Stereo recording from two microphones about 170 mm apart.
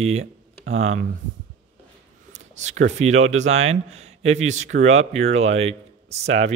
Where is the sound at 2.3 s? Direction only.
45° right (ahead or behind).